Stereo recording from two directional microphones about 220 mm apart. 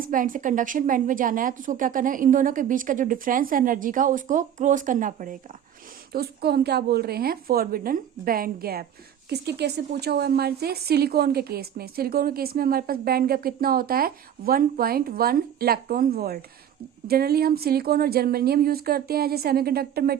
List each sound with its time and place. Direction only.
0.0 s a woman's voice: 40° right (ahead or behind)